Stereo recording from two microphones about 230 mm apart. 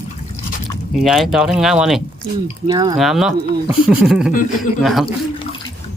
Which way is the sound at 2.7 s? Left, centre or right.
Centre.